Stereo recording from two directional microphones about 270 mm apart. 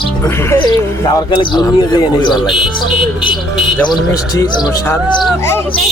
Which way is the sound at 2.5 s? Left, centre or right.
Centre.